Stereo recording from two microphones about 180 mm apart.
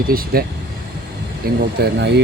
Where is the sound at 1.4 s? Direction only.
55° right (ahead or behind).